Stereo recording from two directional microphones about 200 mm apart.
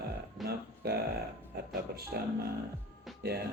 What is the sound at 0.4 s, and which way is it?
Music, 50° right (ahead or behind).